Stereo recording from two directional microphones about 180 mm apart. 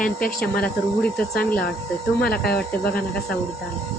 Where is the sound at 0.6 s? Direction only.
5° left (ahead or behind).